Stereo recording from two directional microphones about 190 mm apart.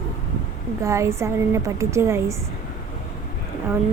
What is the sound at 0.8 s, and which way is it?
A woman's voice, 15° right (ahead or behind).